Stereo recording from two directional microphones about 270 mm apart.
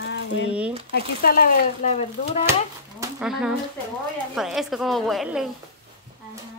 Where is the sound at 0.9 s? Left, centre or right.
Left.